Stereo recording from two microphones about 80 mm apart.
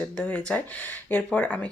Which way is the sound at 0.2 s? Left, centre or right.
Centre.